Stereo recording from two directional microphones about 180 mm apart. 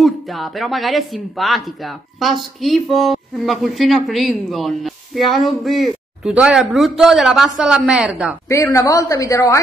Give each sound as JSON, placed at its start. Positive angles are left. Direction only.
{"t": 0.0, "sound": "a woman's voice", "side_deg": 0}
{"t": 8.5, "sound": "speech", "side_deg": 15}